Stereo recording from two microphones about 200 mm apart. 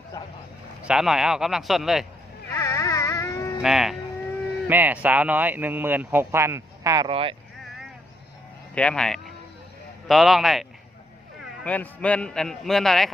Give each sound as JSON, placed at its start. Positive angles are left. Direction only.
{"t": 0.9, "sound": "a man's voice", "side_deg": -5}
{"t": 2.6, "sound": "a sound", "side_deg": 15}
{"t": 3.6, "sound": "a man's voice", "side_deg": 0}
{"t": 7.1, "sound": "speech", "side_deg": -25}
{"t": 8.7, "sound": "a sound", "side_deg": 5}
{"t": 10.1, "sound": "a man's voice", "side_deg": 0}